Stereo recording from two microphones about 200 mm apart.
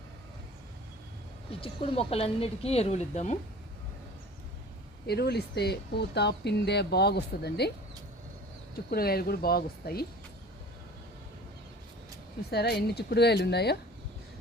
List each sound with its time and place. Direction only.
1.6 s speech: 30° left (ahead or behind)
5.0 s speech: 55° left (ahead or behind)
8.9 s speech: 50° left (ahead or behind)
12.5 s speech: 55° left (ahead or behind)